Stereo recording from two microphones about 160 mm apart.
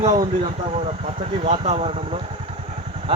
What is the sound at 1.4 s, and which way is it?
Speech, 40° right (ahead or behind).